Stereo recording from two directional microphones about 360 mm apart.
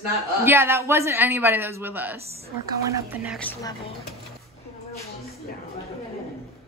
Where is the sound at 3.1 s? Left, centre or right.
Centre.